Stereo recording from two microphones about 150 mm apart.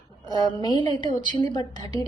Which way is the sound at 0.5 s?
30° left (ahead or behind).